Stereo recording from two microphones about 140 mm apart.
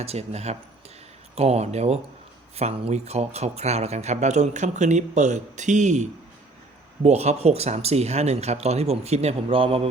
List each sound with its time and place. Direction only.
0.0 s speech: 50° right (ahead or behind)